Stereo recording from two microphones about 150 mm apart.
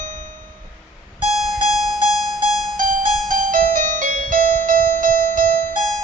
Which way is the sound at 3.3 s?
65° right (ahead or behind).